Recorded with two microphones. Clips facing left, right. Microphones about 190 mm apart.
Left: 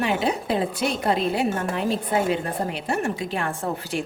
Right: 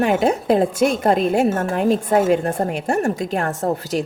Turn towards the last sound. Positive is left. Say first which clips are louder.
# right 6 dB
turn(degrees=-40)  # may be behind; listen again after turning